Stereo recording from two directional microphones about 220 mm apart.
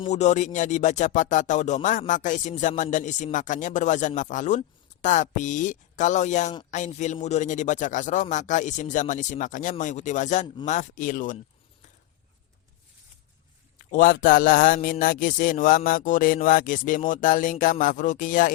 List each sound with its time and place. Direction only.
0.0 s speech: 30° left (ahead or behind)
13.7 s speech: 35° left (ahead or behind)